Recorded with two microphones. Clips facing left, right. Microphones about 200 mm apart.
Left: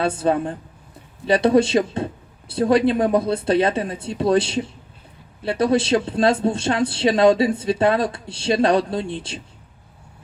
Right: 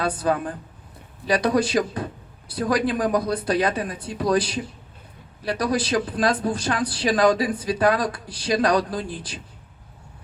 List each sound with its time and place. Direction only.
0.0 s speech: 25° left (ahead or behind)